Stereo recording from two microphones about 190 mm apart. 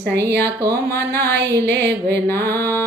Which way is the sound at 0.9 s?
15° left (ahead or behind).